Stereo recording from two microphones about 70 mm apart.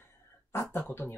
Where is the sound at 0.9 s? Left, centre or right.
Left.